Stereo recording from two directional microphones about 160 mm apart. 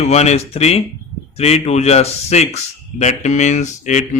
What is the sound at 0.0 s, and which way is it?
A man's voice, 45° left (ahead or behind).